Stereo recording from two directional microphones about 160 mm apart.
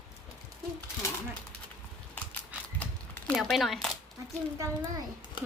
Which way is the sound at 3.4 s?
Centre (ahead or behind).